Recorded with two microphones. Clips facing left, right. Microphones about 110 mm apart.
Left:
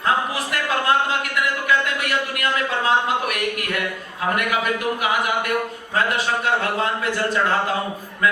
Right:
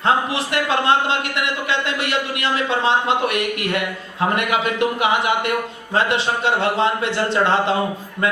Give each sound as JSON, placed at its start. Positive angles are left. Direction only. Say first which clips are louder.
{"t": 0.0, "sound": "a man's voice", "louder": "right 3 dB", "side_deg": -25}
{"t": 2.0, "sound": "a man's voice", "louder": "right 1 dB", "side_deg": -25}